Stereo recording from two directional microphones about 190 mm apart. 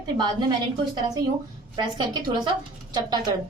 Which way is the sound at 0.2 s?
20° right (ahead or behind).